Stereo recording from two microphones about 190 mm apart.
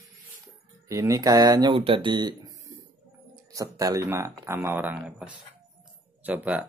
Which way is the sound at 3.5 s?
15° right (ahead or behind).